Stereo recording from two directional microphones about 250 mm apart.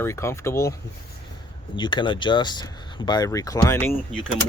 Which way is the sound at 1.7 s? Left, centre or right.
Centre.